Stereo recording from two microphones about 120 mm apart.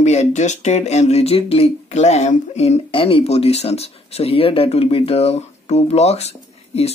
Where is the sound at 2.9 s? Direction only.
50° left (ahead or behind).